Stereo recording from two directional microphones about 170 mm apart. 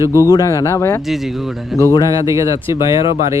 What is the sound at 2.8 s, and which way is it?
Speech, 30° left (ahead or behind).